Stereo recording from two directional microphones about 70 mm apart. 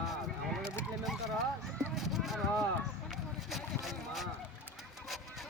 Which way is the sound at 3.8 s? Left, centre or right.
Centre.